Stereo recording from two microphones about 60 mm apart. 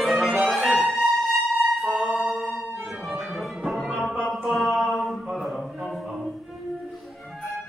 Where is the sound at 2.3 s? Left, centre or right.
Right.